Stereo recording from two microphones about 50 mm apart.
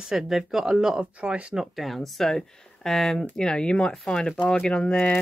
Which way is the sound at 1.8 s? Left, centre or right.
Centre.